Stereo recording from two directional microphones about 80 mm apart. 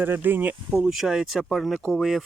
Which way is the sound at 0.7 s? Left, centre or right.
Centre.